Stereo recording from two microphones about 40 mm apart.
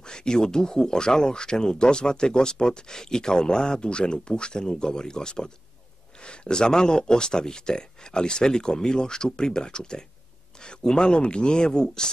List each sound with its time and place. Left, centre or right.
0.0 s speech: centre